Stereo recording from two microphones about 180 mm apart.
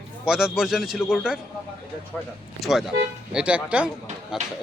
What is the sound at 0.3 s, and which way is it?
A man's voice, 5° right (ahead or behind).